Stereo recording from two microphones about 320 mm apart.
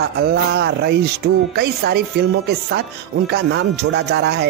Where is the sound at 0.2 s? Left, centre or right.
Right.